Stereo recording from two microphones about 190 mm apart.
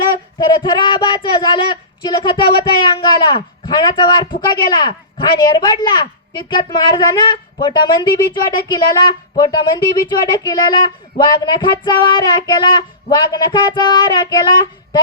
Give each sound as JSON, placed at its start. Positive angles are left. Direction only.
{"t": 0.3, "sound": "a man's voice", "side_deg": 25}